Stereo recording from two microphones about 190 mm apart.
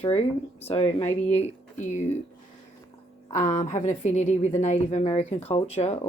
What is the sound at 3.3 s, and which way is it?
A woman's voice, 40° left (ahead or behind).